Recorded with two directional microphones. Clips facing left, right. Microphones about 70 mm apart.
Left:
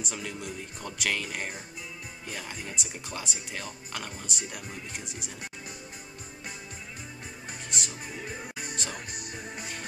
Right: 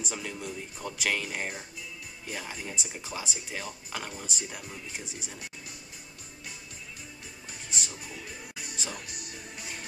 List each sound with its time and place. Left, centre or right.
0.0 s speech: centre
8.2 s music: left
8.7 s music: centre